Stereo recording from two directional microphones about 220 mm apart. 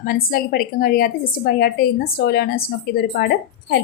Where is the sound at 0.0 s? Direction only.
40° left (ahead or behind).